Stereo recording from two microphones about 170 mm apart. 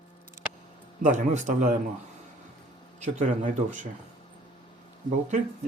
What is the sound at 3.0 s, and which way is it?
Speech, 45° right (ahead or behind).